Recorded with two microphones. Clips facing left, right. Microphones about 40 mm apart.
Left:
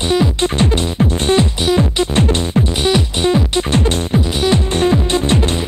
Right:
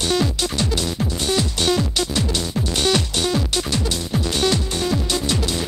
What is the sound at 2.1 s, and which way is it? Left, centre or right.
Music, left.